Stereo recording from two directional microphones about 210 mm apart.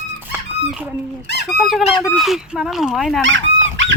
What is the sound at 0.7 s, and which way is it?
Speech, 5° right (ahead or behind).